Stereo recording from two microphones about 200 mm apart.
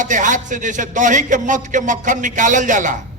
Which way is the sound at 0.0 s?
40° right (ahead or behind).